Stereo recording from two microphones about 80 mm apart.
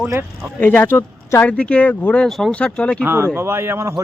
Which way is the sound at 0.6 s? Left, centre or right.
Left.